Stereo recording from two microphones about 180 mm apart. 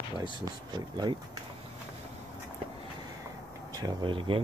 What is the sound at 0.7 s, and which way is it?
Speech, 25° right (ahead or behind).